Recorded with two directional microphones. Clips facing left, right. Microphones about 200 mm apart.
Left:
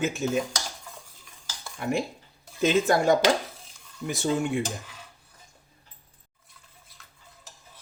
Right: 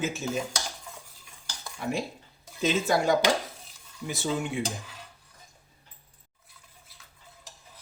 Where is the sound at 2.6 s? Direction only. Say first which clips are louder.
Left 3 dB; 50° left (ahead or behind).